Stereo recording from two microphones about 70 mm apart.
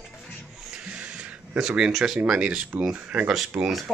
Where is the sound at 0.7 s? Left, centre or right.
Centre.